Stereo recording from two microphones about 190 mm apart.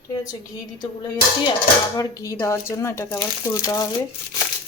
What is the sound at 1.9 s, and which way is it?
Speech, 15° left (ahead or behind).